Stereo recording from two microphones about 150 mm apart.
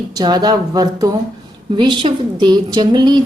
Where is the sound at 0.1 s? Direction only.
25° right (ahead or behind).